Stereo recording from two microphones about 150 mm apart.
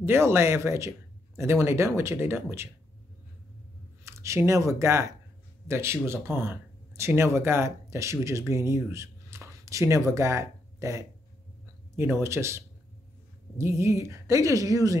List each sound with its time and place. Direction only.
0.0 s speech: 15° right (ahead or behind)
4.0 s a woman's voice: 20° right (ahead or behind)